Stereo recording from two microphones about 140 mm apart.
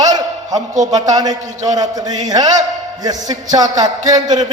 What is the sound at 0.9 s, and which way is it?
A man's voice, 25° right (ahead or behind).